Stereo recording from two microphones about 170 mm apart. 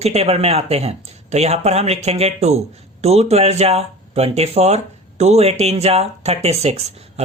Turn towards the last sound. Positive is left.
turn(degrees=-40)  # may be behind; listen again after turning